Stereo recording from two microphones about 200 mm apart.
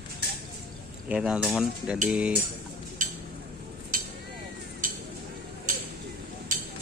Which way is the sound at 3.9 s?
45° right (ahead or behind).